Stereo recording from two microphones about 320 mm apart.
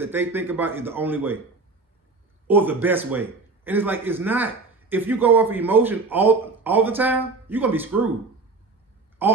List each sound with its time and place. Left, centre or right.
0.0 s speech: centre
2.4 s a man's voice: centre
9.2 s speech: centre